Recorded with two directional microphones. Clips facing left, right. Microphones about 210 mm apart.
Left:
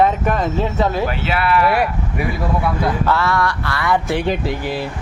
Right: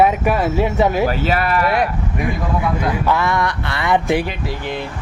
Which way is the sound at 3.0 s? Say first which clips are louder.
Even; 15° right (ahead or behind).